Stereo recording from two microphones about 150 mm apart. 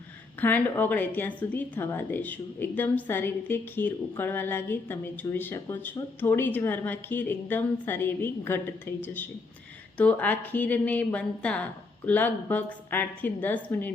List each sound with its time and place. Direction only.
0.3 s a woman's voice: 10° left (ahead or behind)